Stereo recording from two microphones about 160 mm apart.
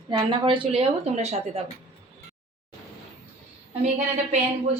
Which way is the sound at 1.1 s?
45° right (ahead or behind).